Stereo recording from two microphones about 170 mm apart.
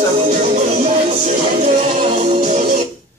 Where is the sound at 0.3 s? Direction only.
45° right (ahead or behind).